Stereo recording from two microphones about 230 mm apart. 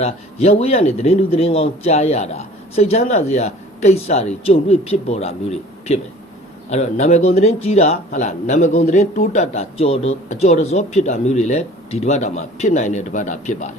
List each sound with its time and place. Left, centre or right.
0.0 s a man's voice: left